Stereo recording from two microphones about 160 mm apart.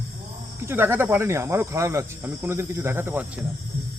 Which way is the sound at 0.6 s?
15° right (ahead or behind).